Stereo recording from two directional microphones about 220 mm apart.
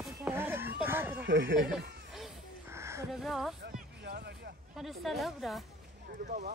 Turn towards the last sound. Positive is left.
turn(degrees=-35)  # may be behind; listen again after turning